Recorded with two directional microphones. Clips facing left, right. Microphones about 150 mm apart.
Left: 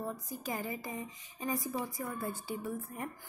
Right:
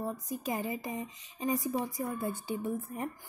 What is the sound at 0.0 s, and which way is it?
Speech, 20° right (ahead or behind).